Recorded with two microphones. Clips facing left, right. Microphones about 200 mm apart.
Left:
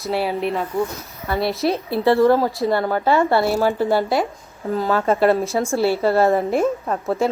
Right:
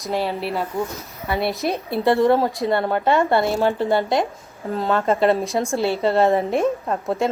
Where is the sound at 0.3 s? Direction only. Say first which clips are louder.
Left 3 dB; centre (ahead or behind).